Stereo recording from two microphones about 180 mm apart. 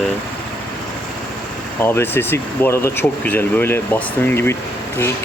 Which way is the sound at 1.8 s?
10° left (ahead or behind).